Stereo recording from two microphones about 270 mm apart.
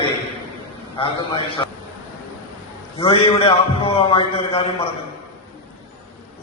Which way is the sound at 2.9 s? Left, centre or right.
Left.